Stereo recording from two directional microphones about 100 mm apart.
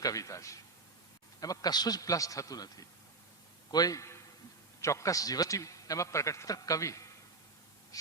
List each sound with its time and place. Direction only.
0.0 s a man's voice: 35° left (ahead or behind)